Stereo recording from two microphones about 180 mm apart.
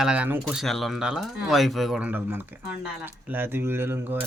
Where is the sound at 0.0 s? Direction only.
5° right (ahead or behind).